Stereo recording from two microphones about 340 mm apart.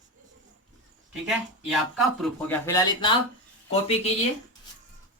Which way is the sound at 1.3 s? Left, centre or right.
Centre.